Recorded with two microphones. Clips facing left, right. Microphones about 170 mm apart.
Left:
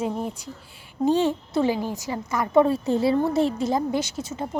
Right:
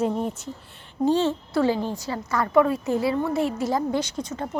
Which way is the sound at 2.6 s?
30° left (ahead or behind).